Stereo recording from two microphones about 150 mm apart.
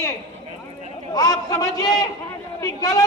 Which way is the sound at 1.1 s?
25° left (ahead or behind).